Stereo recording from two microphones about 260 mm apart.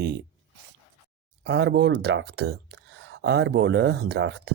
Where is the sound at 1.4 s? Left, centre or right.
Right.